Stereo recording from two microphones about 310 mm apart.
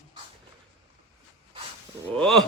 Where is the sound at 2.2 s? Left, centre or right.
Centre.